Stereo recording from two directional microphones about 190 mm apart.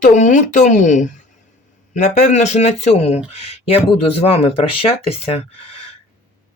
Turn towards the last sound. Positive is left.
turn(degrees=30)  # may be behind; listen again after turning